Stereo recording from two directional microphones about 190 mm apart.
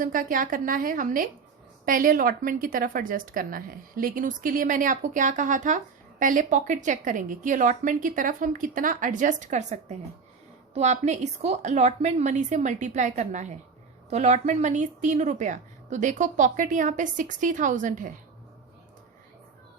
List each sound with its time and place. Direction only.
0.0 s a woman's voice: 45° right (ahead or behind)